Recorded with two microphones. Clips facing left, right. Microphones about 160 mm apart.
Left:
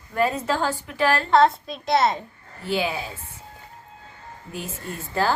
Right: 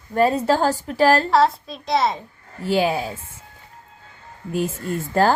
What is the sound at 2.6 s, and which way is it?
Speech, 45° right (ahead or behind).